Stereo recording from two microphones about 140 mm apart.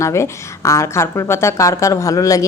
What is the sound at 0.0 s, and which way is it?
A woman's voice, 20° left (ahead or behind).